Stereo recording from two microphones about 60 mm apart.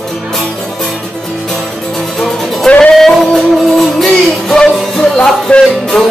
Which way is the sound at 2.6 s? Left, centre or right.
Centre.